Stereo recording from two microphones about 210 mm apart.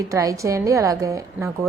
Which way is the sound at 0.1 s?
15° right (ahead or behind).